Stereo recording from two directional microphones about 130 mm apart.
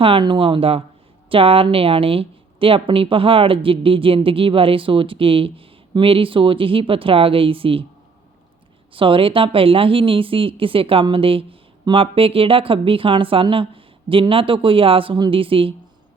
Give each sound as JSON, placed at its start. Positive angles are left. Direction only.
{"t": 0.0, "sound": "speech", "side_deg": -40}
{"t": 8.9, "sound": "speech", "side_deg": -40}